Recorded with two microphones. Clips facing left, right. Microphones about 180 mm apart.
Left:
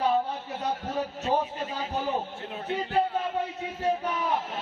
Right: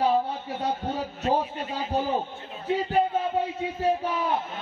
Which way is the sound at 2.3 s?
75° left (ahead or behind).